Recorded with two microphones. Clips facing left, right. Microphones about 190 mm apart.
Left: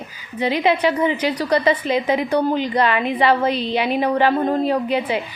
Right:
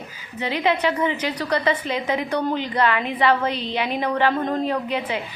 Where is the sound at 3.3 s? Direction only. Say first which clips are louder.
Left 3 dB; 10° left (ahead or behind).